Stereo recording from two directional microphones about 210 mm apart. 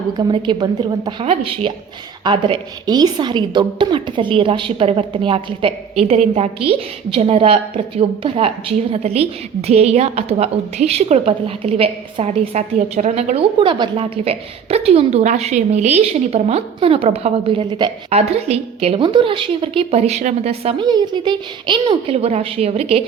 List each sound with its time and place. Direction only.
0.2 s a woman's voice: 20° right (ahead or behind)